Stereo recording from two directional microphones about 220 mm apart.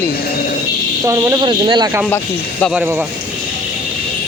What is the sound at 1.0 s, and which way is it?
Speech, 15° right (ahead or behind).